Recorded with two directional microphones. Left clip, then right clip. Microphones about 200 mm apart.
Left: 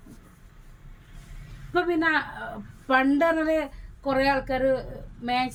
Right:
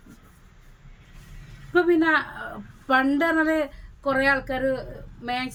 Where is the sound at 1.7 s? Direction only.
25° right (ahead or behind).